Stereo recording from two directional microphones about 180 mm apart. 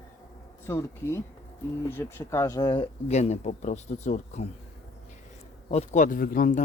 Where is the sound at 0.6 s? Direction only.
15° left (ahead or behind); by 4.4 s 40° left (ahead or behind).